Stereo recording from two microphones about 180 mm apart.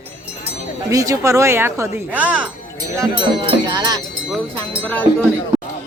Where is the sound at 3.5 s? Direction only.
25° right (ahead or behind).